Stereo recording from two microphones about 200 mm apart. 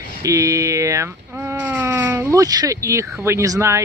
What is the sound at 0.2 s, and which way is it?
Speech, 15° right (ahead or behind).